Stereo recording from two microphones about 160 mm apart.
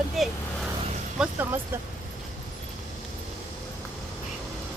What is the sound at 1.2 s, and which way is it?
Speech, 15° right (ahead or behind).